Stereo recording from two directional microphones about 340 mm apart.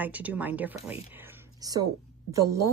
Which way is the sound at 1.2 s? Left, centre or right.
Centre.